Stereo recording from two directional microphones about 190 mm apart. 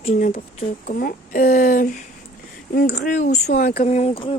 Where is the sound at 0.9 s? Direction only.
50° left (ahead or behind).